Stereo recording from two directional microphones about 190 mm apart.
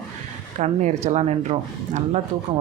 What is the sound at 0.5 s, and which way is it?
Speech, 40° right (ahead or behind).